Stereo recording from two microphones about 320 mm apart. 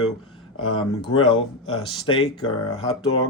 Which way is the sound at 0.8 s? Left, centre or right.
Centre.